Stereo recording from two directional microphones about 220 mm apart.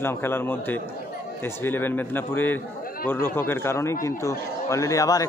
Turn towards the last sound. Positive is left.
turn(degrees=15)  # may be behind; listen again after turning